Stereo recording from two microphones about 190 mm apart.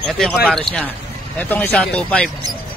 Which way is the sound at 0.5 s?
5° left (ahead or behind).